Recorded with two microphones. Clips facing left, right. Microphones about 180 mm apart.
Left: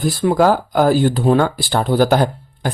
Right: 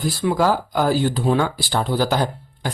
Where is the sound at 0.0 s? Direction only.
55° left (ahead or behind).